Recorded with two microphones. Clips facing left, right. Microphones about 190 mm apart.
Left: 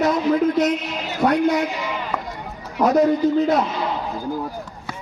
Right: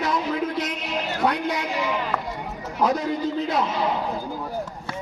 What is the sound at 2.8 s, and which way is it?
Speech, 45° left (ahead or behind).